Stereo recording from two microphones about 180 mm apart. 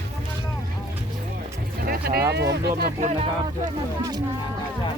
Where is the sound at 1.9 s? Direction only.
55° right (ahead or behind).